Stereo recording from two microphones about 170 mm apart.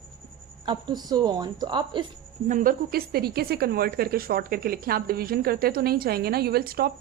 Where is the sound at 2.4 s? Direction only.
50° right (ahead or behind).